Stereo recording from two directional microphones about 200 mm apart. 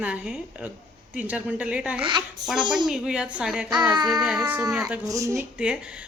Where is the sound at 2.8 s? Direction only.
5° right (ahead or behind).